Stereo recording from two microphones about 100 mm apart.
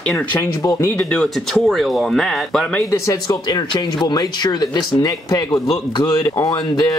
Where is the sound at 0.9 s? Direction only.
10° left (ahead or behind).